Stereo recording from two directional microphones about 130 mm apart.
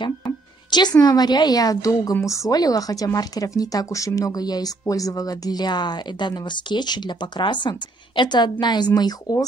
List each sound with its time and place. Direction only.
0.7 s a woman's voice: 35° left (ahead or behind)